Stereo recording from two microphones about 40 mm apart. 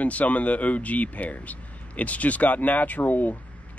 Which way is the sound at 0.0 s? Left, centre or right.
Left.